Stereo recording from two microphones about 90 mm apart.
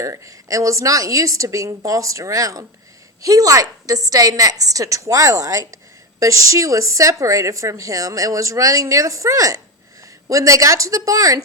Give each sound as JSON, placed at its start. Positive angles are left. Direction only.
{"t": 0.0, "sound": "a woman's voice", "side_deg": -40}